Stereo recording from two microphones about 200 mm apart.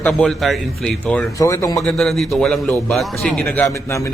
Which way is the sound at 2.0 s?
Centre (ahead or behind).